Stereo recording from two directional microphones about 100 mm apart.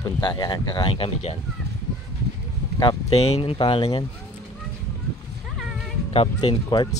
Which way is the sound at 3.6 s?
70° left (ahead or behind).